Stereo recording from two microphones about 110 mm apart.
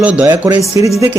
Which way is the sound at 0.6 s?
30° right (ahead or behind).